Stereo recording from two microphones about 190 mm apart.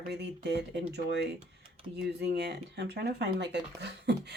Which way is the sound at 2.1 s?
60° right (ahead or behind).